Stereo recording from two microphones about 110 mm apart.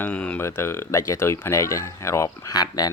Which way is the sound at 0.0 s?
10° left (ahead or behind).